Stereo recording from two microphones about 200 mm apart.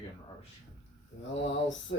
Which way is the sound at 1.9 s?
65° left (ahead or behind).